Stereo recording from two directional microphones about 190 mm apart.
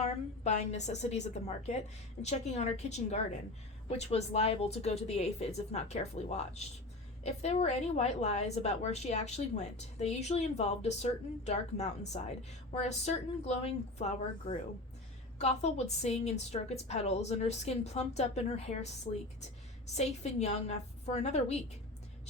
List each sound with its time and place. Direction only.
0.0 s a woman's voice: 35° left (ahead or behind)
19.9 s a woman's voice: 35° left (ahead or behind)